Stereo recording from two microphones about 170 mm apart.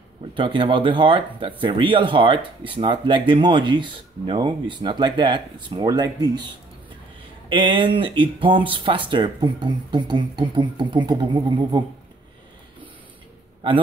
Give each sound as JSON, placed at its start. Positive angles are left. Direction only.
{"t": 0.3, "sound": "speech", "side_deg": -30}